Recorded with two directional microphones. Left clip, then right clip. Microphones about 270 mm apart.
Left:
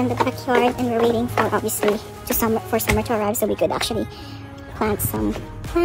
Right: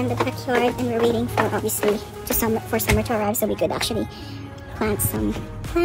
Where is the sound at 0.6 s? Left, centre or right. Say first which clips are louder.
Left 2 dB; centre.